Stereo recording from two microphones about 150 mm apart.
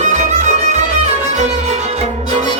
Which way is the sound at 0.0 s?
50° right (ahead or behind).